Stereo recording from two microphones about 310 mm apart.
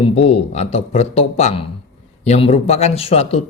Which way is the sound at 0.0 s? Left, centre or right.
Centre.